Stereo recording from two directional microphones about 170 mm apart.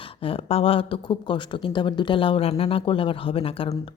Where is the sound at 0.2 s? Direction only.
35° left (ahead or behind).